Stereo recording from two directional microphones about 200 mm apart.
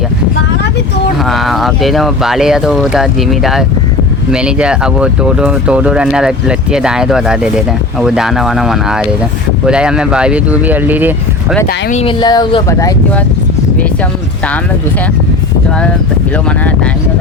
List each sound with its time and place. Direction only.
1.2 s speech: centre (ahead or behind)
11.9 s speech: 35° left (ahead or behind)
12.2 s speech: 20° left (ahead or behind)